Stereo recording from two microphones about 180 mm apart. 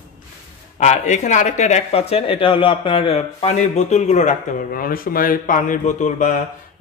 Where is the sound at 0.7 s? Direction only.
40° left (ahead or behind).